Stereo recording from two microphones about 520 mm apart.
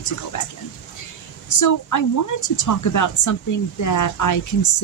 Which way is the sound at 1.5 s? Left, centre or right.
Left.